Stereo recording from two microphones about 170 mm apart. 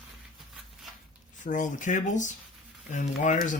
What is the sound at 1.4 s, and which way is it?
Speech, 50° left (ahead or behind).